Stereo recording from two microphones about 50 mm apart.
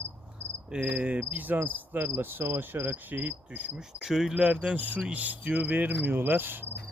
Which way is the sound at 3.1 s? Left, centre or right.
Right.